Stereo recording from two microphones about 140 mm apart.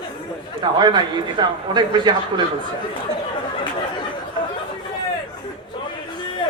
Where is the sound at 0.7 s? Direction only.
30° right (ahead or behind).